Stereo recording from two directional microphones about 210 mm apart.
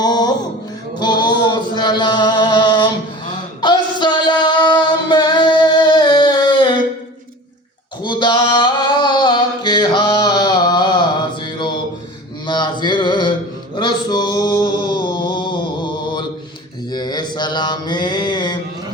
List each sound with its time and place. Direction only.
0.0 s music: 20° left (ahead or behind)
0.9 s chant: 20° left (ahead or behind)
3.2 s a sound: 20° left (ahead or behind)
8.0 s a sound: 20° left (ahead or behind)
12.5 s mantra: 20° left (ahead or behind)
13.7 s male singing: 20° left (ahead or behind)
16.9 s mantra: 20° left (ahead or behind)